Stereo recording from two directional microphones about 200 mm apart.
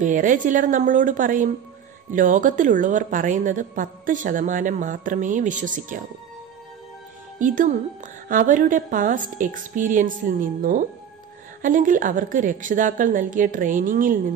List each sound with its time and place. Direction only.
0.0 s a woman's voice: 40° right (ahead or behind)
7.3 s a woman's voice: 40° right (ahead or behind)